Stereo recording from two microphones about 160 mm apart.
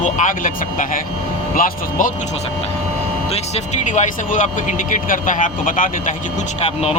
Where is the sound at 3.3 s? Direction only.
45° left (ahead or behind).